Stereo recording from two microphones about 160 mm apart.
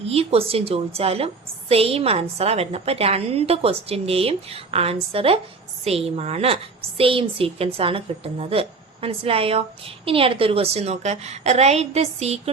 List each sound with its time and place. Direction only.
0.0 s a woman's voice: 40° right (ahead or behind)